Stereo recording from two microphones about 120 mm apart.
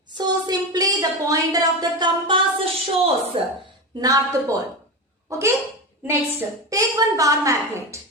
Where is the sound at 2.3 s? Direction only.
50° right (ahead or behind).